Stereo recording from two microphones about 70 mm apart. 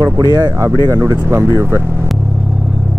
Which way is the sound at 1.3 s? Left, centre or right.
Right.